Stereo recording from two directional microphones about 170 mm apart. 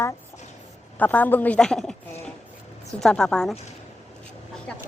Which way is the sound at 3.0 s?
5° left (ahead or behind).